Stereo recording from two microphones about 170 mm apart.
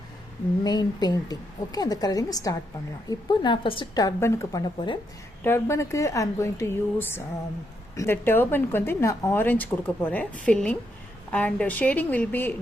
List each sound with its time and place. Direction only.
0.6 s a woman's voice: 25° left (ahead or behind)